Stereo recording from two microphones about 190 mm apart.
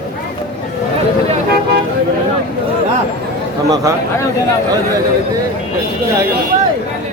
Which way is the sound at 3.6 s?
20° right (ahead or behind).